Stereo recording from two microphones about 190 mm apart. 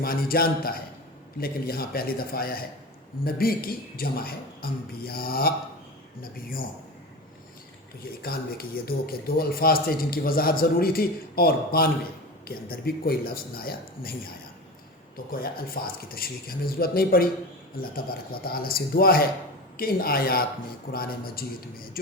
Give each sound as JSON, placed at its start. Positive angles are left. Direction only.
{"t": 0.0, "sound": "speech", "side_deg": 50}
{"t": 8.2, "sound": "speech", "side_deg": 55}